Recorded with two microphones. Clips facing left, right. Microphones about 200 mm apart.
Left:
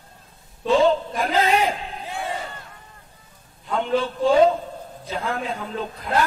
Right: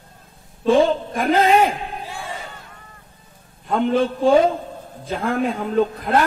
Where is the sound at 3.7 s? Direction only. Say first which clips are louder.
Right 4 dB; 55° right (ahead or behind).